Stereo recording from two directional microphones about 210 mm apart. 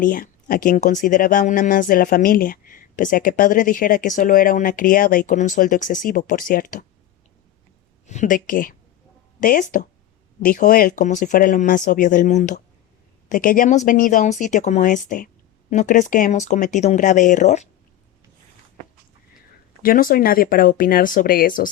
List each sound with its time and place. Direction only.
0.0 s speech: 40° left (ahead or behind)
8.0 s speech: 35° left (ahead or behind)
19.8 s speech: 40° left (ahead or behind)